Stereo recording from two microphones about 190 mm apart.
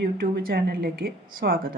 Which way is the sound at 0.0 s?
55° right (ahead or behind).